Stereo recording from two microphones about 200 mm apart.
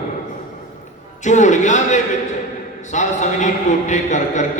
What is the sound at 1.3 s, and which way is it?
A man's voice, 35° left (ahead or behind).